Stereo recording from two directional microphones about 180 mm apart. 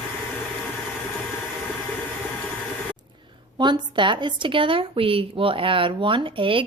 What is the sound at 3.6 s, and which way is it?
A woman's voice, 25° right (ahead or behind).